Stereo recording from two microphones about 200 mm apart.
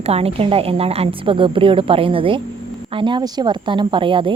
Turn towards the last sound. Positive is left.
turn(degrees=-25)  # may be behind; listen again after turning